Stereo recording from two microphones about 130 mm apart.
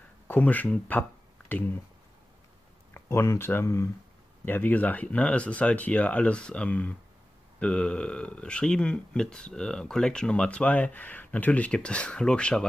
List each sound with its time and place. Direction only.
0.3 s speech: 15° left (ahead or behind)
2.9 s speech: 20° left (ahead or behind)
4.5 s speech: 15° left (ahead or behind)